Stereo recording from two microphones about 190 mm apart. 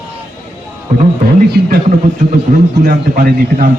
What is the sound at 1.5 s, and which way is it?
Speech, 55° right (ahead or behind).